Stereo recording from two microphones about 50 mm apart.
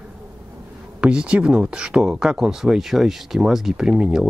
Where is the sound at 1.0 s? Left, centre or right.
Centre.